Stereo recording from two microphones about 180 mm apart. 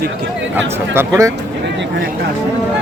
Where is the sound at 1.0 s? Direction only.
15° right (ahead or behind).